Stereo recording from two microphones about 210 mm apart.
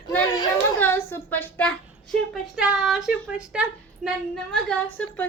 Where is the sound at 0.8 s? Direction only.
10° left (ahead or behind).